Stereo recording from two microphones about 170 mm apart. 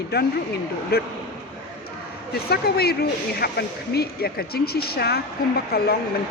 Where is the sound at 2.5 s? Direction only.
70° left (ahead or behind).